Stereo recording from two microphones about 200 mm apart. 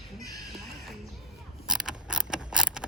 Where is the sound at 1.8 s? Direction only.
5° right (ahead or behind).